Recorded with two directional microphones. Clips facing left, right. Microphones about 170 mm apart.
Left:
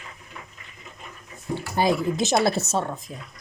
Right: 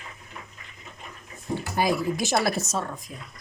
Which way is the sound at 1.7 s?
25° left (ahead or behind).